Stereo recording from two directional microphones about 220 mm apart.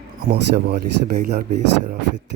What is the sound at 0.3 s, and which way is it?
Speech, 45° right (ahead or behind).